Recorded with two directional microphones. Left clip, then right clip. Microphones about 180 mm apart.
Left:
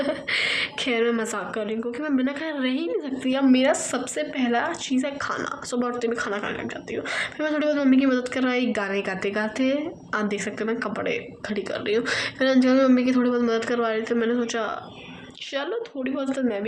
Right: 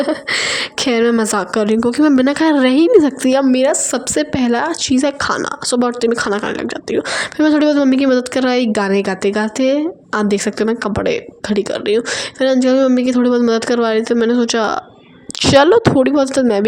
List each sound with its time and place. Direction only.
0.0 s a woman's voice: 70° right (ahead or behind)
15.4 s a woman's voice: 80° right